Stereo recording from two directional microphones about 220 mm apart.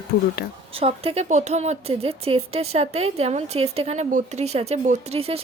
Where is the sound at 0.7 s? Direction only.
25° right (ahead or behind).